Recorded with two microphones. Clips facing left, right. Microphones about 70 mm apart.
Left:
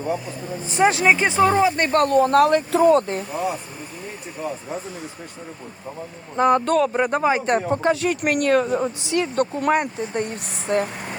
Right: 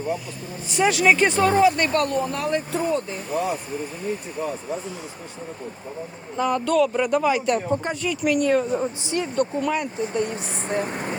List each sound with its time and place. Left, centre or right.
0.7 s speech: left
1.0 s speech: centre
1.9 s speech: left
2.3 s speech: left
6.3 s speech: left
7.7 s speech: left
10.8 s vehicle: centre